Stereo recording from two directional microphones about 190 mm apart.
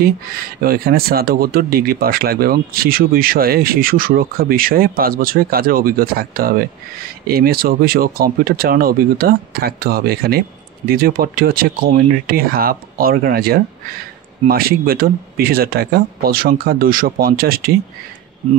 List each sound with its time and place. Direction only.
0.6 s speech: 50° right (ahead or behind)